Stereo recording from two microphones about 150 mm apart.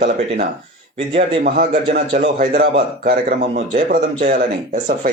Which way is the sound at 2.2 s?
65° right (ahead or behind).